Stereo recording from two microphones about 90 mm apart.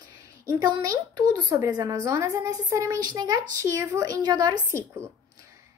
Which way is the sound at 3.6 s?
35° right (ahead or behind).